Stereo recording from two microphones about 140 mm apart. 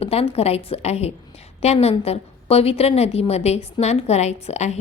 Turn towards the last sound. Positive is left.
turn(degrees=50)  # may be behind; listen again after turning